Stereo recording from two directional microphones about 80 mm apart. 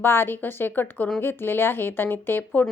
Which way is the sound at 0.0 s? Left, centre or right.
Left.